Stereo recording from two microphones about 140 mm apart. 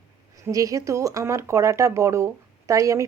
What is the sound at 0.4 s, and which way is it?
Speech, 25° right (ahead or behind).